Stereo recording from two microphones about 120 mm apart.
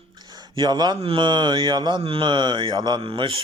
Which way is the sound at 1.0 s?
50° right (ahead or behind).